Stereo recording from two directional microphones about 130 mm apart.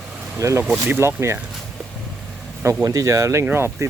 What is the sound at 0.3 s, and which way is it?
Speech, 25° right (ahead or behind).